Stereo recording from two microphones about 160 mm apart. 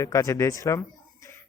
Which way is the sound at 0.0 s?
20° left (ahead or behind).